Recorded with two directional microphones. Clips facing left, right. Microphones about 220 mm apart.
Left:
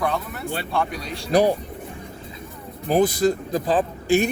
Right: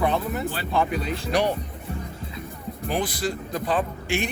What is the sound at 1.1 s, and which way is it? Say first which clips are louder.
Speech: left 7 dB; 35° left (ahead or behind).